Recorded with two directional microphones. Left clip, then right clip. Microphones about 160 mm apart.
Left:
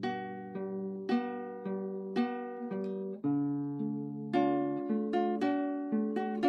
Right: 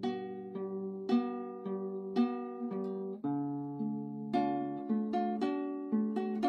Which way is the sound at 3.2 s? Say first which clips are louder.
Left 5 dB; 40° left (ahead or behind).